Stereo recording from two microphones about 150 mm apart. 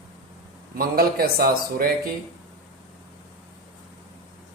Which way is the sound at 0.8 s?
85° right.